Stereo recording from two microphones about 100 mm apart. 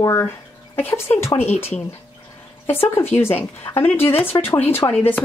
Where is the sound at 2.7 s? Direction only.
20° left (ahead or behind).